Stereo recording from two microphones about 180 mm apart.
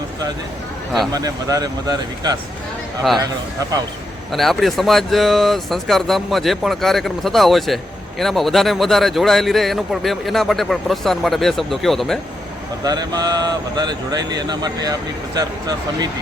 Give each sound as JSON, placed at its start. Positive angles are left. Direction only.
{"t": 1.1, "sound": "speech", "side_deg": -20}
{"t": 4.3, "sound": "speech", "side_deg": 0}
{"t": 12.8, "sound": "speech", "side_deg": -20}